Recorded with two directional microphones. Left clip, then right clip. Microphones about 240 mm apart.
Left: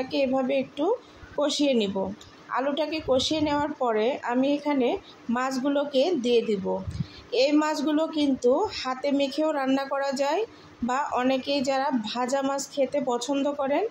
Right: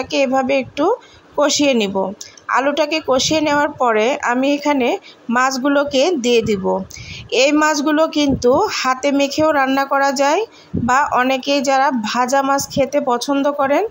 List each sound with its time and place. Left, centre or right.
0.0 s speech: right